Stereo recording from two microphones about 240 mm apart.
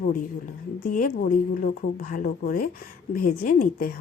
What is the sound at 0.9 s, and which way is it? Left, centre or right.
Speech, left.